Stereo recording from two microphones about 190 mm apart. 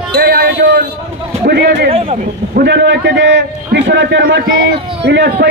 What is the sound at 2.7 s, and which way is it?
Speech, 65° right (ahead or behind).